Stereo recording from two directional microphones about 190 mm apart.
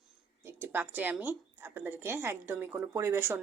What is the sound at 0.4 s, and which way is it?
Speech, 10° right (ahead or behind).